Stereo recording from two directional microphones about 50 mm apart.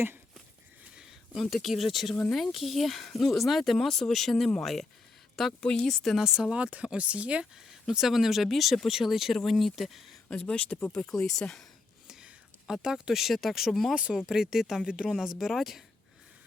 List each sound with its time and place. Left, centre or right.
0.9 s speech: centre
5.5 s speech: left
5.8 s speech: centre
6.1 s speech: centre; by 7.4 s right
7.5 s speech: centre
10.4 s speech: left
11.0 s speech: centre
12.0 s speech: centre
13.9 s speech: centre
15.1 s speech: centre